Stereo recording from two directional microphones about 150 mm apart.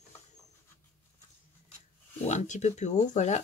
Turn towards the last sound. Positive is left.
turn(degrees=50)  # may be behind; listen again after turning